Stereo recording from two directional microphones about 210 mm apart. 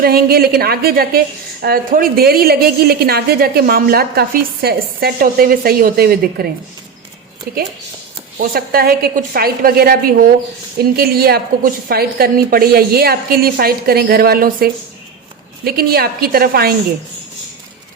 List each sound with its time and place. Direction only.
0.0 s a woman's voice: 45° right (ahead or behind)